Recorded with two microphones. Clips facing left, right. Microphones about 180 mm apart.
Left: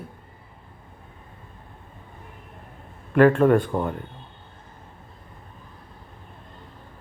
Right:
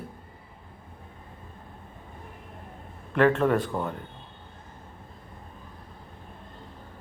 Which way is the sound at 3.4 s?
25° left (ahead or behind).